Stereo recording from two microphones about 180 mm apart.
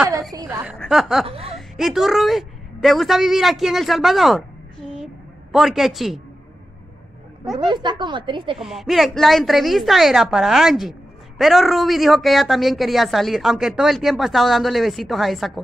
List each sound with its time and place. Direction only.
0.3 s a woman's voice: 20° right (ahead or behind)
0.7 s a woman's voice: centre (ahead or behind)
1.2 s speech: 30° right (ahead or behind)
1.5 s a woman's voice: centre (ahead or behind)
5.5 s a woman's voice: centre (ahead or behind)
7.5 s speech: 25° right (ahead or behind)
8.5 s a woman's voice: centre (ahead or behind)